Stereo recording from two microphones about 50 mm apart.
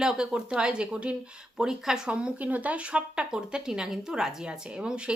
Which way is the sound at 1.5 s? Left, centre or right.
Centre.